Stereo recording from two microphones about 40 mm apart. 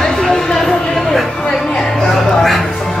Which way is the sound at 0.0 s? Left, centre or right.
Centre.